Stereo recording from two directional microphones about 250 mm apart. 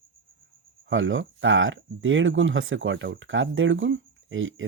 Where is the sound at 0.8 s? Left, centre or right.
Right.